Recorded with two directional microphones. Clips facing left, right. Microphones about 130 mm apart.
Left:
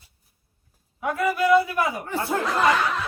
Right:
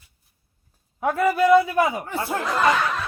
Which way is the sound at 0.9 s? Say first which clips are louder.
Right 4 dB; 30° right (ahead or behind).